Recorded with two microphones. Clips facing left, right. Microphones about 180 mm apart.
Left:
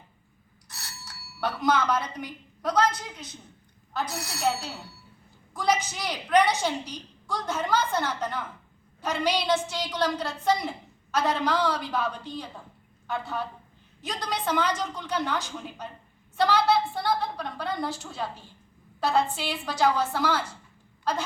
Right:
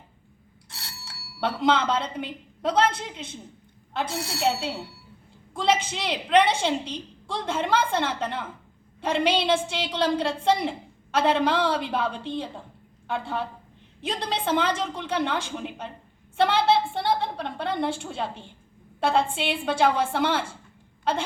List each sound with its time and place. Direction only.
0.7 s a woman's voice: 25° right (ahead or behind)